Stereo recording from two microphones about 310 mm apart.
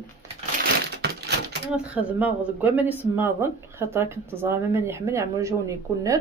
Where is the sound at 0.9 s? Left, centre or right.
Right.